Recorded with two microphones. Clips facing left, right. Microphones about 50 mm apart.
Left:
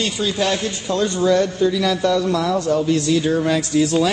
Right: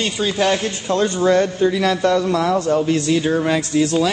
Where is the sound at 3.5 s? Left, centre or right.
Centre.